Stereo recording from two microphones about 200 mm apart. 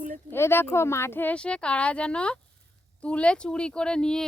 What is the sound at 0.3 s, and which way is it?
Speech, 10° left (ahead or behind).